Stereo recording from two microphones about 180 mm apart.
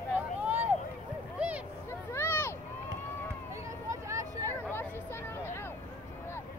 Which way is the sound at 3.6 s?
15° right (ahead or behind).